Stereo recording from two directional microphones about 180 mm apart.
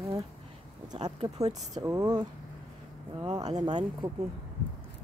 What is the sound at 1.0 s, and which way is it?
Speech, 20° right (ahead or behind).